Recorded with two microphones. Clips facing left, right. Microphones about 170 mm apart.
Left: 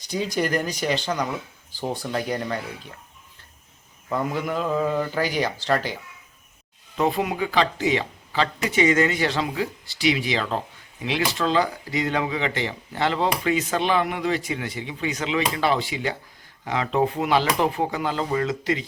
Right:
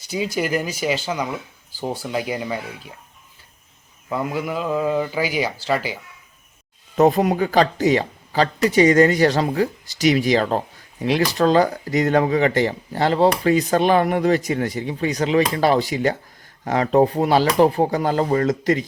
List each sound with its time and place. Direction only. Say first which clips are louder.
0.3 s speech: even; 5° right (ahead or behind)
4.1 s speech: right 1 dB; 5° right (ahead or behind)
6.9 s speech: right 7 dB; 45° right (ahead or behind)